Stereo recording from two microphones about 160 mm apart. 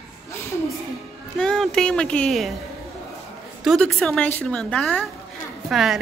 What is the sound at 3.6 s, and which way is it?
A woman's voice, centre (ahead or behind).